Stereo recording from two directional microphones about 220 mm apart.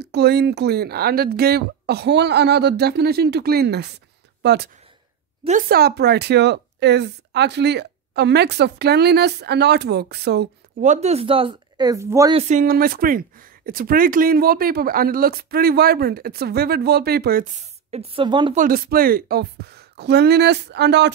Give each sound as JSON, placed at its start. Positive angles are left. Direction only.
{"t": 0.0, "sound": "speech", "side_deg": -50}
{"t": 5.4, "sound": "speech", "side_deg": -35}
{"t": 10.8, "sound": "speech", "side_deg": -30}
{"t": 12.4, "sound": "speech", "side_deg": -35}
{"t": 17.9, "sound": "speech", "side_deg": -25}
{"t": 18.6, "sound": "speech", "side_deg": -40}